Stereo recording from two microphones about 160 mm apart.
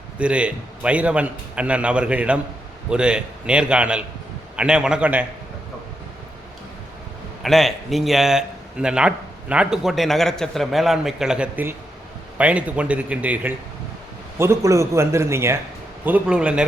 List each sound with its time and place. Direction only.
0.2 s a man's voice: 5° right (ahead or behind)
7.4 s a man's voice: centre (ahead or behind)